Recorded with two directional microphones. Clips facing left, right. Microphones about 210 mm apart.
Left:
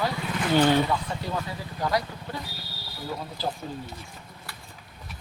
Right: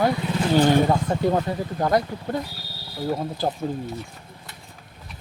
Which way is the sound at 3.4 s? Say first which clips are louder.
Right 5 dB; 50° right (ahead or behind).